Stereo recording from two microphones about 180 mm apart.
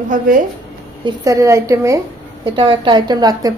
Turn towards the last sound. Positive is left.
turn(degrees=-20)  # may be behind; listen again after turning